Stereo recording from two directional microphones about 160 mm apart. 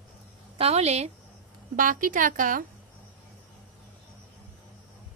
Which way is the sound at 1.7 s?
55° right (ahead or behind).